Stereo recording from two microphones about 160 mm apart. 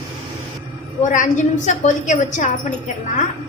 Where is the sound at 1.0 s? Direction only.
55° left (ahead or behind).